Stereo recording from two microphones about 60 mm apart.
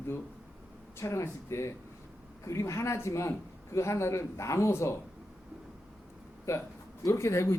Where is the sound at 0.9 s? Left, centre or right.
Left.